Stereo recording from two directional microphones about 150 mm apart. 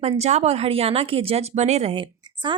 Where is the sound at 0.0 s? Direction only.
45° right (ahead or behind).